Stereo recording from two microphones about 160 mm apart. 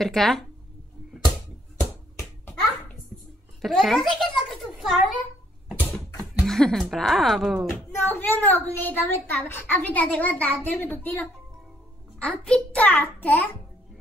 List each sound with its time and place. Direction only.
0.0 s speech: centre (ahead or behind)
1.8 s a sound: 15° left (ahead or behind)
3.6 s a sound: centre (ahead or behind)
5.7 s mechanisms: 5° left (ahead or behind)
6.4 s speech: centre (ahead or behind)
8.0 s a child's voice: 15° left (ahead or behind)